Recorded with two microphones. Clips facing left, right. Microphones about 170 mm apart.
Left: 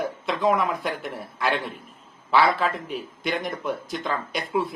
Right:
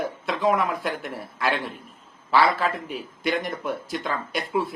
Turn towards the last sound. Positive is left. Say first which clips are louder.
# even
turn(degrees=0)  # may be behind; listen again after turning